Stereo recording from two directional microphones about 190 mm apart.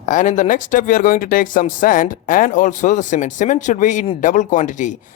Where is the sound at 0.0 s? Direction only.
40° left (ahead or behind).